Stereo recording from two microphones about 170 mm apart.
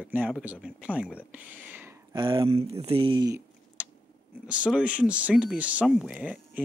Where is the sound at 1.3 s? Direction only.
10° right (ahead or behind).